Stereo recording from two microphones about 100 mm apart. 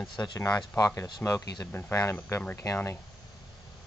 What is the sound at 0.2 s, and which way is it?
Speech, 35° left (ahead or behind).